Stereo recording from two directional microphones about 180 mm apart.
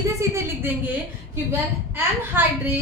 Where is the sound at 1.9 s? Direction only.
10° right (ahead or behind).